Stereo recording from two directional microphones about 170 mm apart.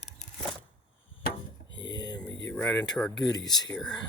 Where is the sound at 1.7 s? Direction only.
90° left.